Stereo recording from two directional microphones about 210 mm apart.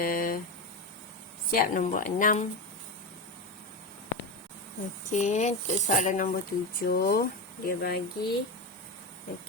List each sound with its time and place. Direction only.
0.0 s speech: 40° left (ahead or behind)
1.5 s speech: 40° left (ahead or behind)
5.1 s speech: 35° left (ahead or behind)